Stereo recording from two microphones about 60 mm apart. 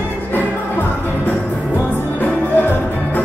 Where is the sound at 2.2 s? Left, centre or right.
Left.